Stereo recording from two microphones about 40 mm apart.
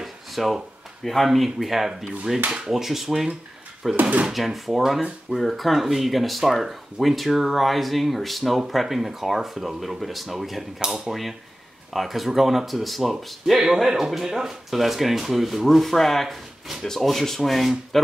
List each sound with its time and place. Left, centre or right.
0.0 s a sound: centre
1.0 s speech: centre
4.0 s speech: right
4.3 s speech: centre
10.8 s speech: centre
11.9 s speech: centre
13.5 s speech: centre
17.0 s sanding: centre
17.5 s speech: centre